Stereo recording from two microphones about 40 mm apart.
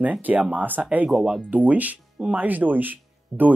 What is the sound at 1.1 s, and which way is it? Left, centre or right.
Speech, centre.